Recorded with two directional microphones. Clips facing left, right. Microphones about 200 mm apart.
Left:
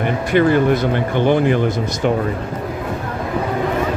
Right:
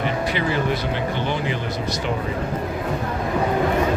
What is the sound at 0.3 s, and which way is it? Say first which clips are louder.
Speech: left 9 dB; 50° left (ahead or behind).